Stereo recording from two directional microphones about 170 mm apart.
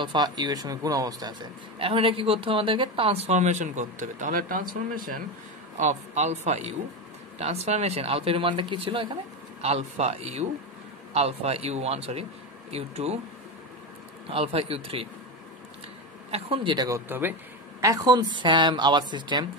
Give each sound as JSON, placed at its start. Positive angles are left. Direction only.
{"t": 0.0, "sound": "a man's voice", "side_deg": -25}
{"t": 1.8, "sound": "speech", "side_deg": -35}
{"t": 5.8, "sound": "speech", "side_deg": -45}
{"t": 14.3, "sound": "speech", "side_deg": -35}
{"t": 16.3, "sound": "a man's voice", "side_deg": -35}